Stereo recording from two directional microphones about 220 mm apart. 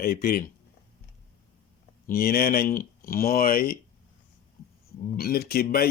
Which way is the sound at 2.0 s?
40° left (ahead or behind).